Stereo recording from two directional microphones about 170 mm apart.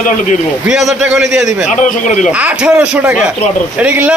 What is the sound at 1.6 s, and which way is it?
Speech, 45° left (ahead or behind).